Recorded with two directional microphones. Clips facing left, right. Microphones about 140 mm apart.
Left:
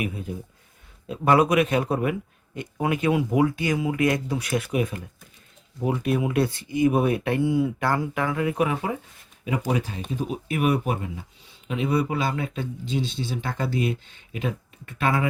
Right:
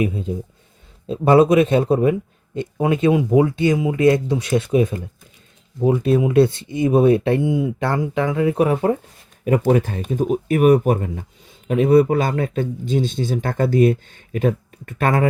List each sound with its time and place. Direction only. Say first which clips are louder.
0.0 s speech: right 8 dB; 25° right (ahead or behind); by 15.3 s 50° right (ahead or behind)